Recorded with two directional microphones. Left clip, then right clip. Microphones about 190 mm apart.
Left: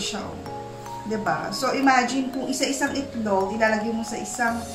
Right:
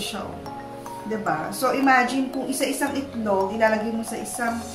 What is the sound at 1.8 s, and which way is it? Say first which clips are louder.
Speech: right 1 dB; centre (ahead or behind).